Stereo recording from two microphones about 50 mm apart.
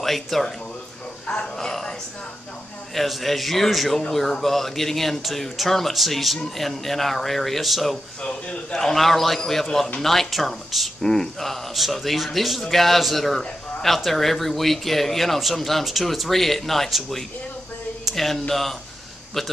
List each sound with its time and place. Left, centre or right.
0.0 s a man's voice: centre
8.2 s a man's voice: centre
11.0 s a man's voice: centre